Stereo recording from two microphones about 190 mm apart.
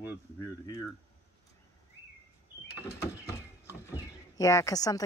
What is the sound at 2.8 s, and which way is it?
Speech, 15° left (ahead or behind).